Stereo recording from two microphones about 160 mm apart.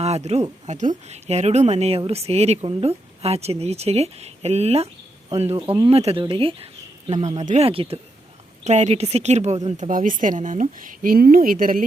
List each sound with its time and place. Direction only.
0.0 s a woman's voice: 40° right (ahead or behind)
9.9 s speech: 55° right (ahead or behind)